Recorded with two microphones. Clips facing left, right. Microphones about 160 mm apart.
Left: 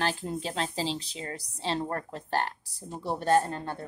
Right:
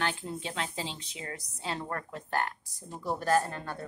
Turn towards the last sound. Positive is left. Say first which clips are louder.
# left 3 dB
turn(degrees=25)  # may be behind; listen again after turning